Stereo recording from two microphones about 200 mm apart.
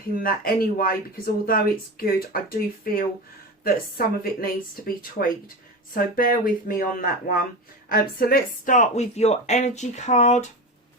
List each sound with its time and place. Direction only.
0.2 s speech: 45° left (ahead or behind)
5.9 s speech: 45° left (ahead or behind)